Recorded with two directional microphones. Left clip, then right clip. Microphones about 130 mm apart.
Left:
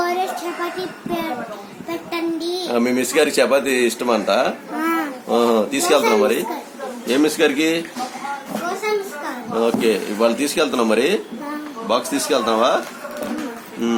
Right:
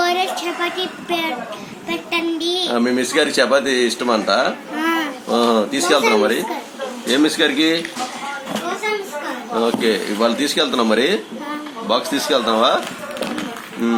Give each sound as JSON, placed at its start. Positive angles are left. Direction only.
{"t": 0.0, "sound": "a sound", "side_deg": 10}
{"t": 2.0, "sound": "a woman's voice", "side_deg": 20}
{"t": 9.6, "sound": "a woman's voice", "side_deg": 25}